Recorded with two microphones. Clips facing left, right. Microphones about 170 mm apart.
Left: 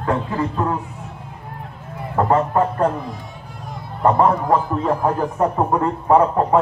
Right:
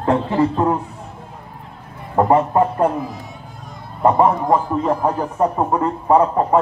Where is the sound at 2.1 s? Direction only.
15° right (ahead or behind).